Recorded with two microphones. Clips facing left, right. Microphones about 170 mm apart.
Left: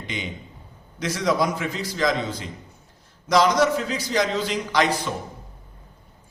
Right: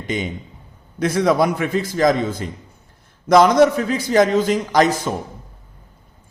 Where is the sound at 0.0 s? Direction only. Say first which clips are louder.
Right 8 dB; 45° right (ahead or behind).